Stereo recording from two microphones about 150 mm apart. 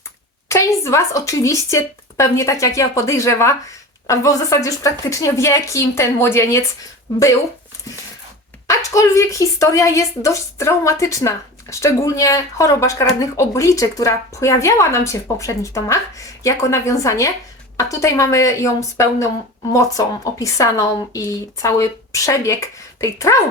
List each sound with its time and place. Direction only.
0.4 s a woman's voice: 20° left (ahead or behind)
8.7 s a woman's voice: 20° left (ahead or behind)